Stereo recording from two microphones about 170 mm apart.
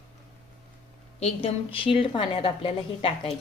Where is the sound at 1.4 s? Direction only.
30° left (ahead or behind).